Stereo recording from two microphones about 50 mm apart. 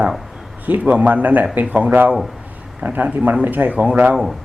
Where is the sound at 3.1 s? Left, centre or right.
Right.